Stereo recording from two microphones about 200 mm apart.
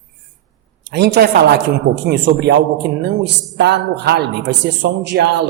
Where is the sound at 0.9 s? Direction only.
55° right (ahead or behind).